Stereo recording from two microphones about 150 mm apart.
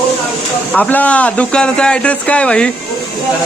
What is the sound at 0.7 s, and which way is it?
Speech, 10° left (ahead or behind).